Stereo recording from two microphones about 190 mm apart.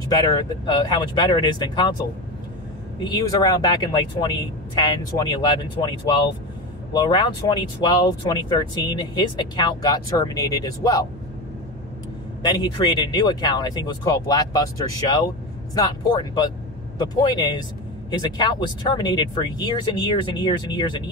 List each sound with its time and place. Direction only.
0.1 s speech: 20° left (ahead or behind)
3.0 s speech: 20° left (ahead or behind)
12.4 s speech: 25° left (ahead or behind)
15.7 s speech: 20° left (ahead or behind)